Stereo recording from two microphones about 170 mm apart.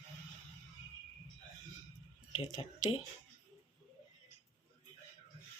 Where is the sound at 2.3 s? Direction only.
30° left (ahead or behind).